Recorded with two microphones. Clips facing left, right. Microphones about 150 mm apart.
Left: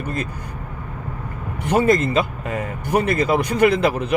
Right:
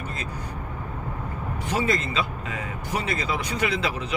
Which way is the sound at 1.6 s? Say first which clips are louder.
Left 9 dB; 50° left (ahead or behind).